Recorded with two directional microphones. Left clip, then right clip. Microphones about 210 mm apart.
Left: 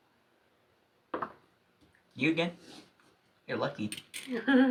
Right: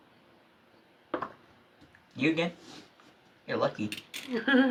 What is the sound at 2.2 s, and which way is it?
Speech, centre (ahead or behind).